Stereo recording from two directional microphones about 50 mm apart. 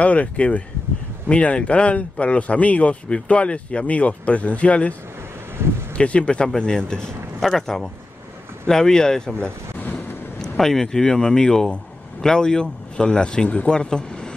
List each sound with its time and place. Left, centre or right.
0.0 s speech: left
5.6 s speech: right
5.9 s speech: left
7.3 s speech: centre
10.6 s speech: centre; by 13.7 s left
13.7 s speech: centre